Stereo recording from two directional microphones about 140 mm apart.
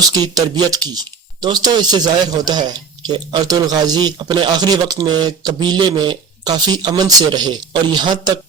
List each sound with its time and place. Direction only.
0.0 s speech: 30° right (ahead or behind)